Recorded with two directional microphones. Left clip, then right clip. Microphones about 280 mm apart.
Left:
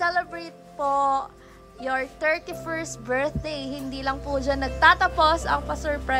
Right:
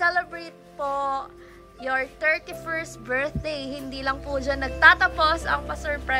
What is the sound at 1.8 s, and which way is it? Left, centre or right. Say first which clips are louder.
A woman's voice: right 1 dB; centre.